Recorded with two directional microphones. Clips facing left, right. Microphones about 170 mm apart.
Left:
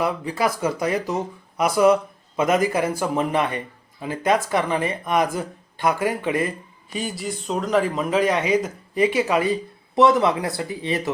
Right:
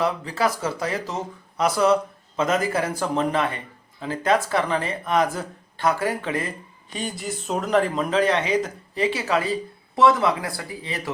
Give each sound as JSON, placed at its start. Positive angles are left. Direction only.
{"t": 0.0, "sound": "speech", "side_deg": 10}
{"t": 6.9, "sound": "speech", "side_deg": 5}